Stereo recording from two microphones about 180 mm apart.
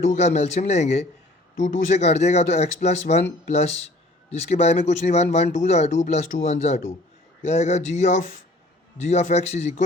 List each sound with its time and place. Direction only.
0.1 s speech: 35° left (ahead or behind)